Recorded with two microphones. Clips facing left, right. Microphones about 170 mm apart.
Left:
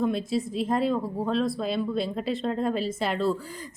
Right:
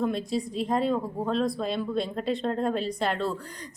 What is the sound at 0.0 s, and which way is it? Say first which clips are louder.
A woman's voice: left 2 dB; centre (ahead or behind).